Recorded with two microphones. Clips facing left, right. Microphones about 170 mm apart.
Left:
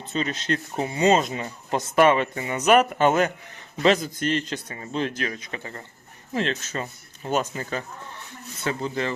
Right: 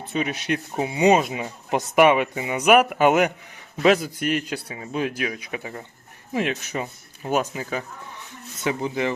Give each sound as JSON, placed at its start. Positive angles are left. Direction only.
{"t": 0.0, "sound": "speech", "side_deg": -10}